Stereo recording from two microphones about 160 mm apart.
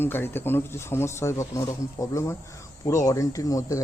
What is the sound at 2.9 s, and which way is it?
Speech, 20° left (ahead or behind).